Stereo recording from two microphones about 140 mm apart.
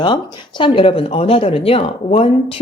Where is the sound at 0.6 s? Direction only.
40° left (ahead or behind).